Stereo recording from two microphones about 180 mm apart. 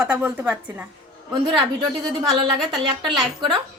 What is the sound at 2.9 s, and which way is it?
Speech, 25° right (ahead or behind).